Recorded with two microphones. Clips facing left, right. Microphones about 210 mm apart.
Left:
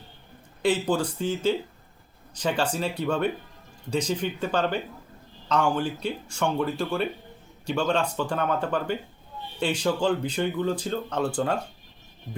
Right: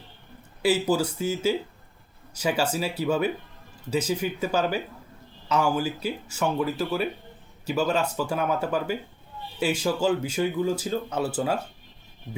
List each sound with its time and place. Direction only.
0.6 s speech: 5° right (ahead or behind)